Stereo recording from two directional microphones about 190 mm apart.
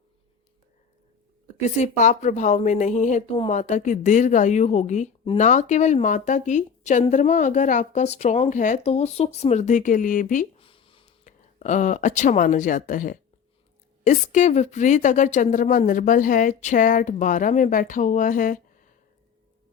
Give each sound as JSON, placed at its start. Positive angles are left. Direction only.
{"t": 1.8, "sound": "a woman's voice", "side_deg": 40}
{"t": 10.6, "sound": "a sound", "side_deg": 30}
{"t": 11.3, "sound": "a woman's voice", "side_deg": 40}